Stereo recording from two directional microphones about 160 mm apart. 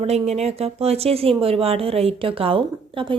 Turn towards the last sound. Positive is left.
turn(degrees=-35)  # may be behind; listen again after turning